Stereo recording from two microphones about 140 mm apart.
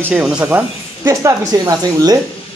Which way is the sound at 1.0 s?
25° right (ahead or behind).